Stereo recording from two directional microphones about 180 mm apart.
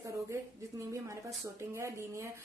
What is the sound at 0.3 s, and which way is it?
A woman's voice, 15° right (ahead or behind).